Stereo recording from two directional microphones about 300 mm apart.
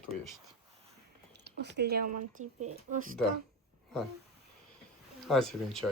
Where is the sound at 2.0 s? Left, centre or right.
Right.